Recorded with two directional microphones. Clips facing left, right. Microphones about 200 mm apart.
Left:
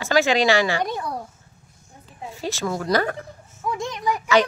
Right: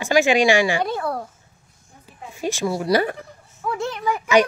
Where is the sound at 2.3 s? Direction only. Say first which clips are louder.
Right 3 dB; 15° right (ahead or behind).